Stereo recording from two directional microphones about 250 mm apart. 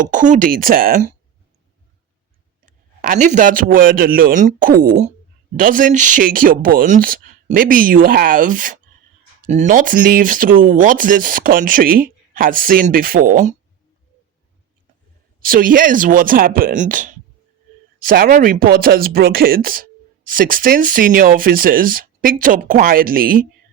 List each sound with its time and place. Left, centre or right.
0.1 s speech: right
2.6 s speech: right
15.4 s speech: right